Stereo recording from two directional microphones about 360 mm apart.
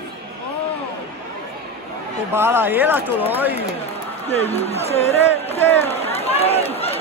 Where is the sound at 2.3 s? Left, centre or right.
Centre.